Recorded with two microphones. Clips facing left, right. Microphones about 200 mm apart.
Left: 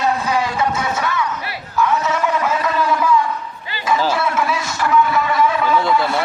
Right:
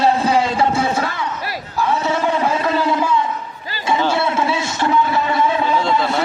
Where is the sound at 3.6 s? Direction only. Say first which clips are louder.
Right 1 dB; 40° right (ahead or behind).